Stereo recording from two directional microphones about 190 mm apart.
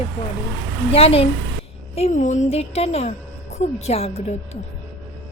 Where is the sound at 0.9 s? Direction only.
30° left (ahead or behind).